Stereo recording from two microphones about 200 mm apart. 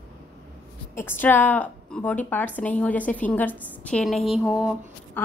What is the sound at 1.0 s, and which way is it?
A woman's voice, 10° left (ahead or behind).